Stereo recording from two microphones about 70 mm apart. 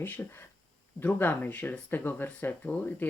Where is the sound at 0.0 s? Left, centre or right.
Left.